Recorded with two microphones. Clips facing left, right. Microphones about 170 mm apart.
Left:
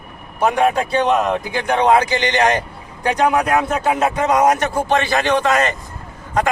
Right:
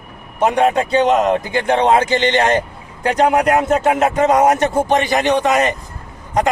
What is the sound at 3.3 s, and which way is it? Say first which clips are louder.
A man's voice: right 4 dB; 20° right (ahead or behind).